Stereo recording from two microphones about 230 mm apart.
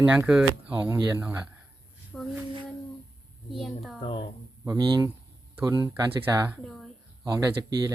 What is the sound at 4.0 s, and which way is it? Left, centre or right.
Speech, left.